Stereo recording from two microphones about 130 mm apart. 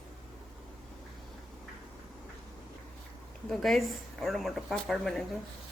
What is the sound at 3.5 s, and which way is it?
Speech, centre (ahead or behind).